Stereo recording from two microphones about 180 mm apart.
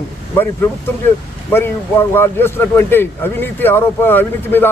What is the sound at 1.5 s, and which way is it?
Speech, 10° left (ahead or behind).